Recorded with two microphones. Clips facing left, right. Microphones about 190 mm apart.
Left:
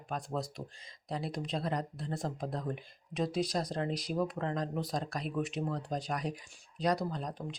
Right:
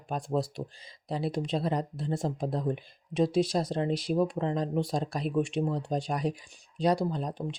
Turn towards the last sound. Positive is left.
turn(degrees=-30)  # may be behind; listen again after turning